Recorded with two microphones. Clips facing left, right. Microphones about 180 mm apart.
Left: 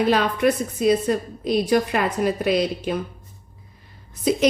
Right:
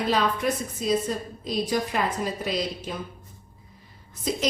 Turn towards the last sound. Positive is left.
turn(degrees=65)  # may be behind; listen again after turning